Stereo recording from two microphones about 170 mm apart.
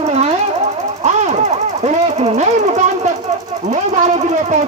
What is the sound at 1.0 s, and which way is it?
Jackhammer, 45° right (ahead or behind).